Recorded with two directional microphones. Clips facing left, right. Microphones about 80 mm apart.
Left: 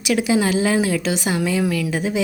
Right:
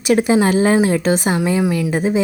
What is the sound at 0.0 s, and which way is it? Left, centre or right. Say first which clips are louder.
A woman's voice: right 4 dB; right.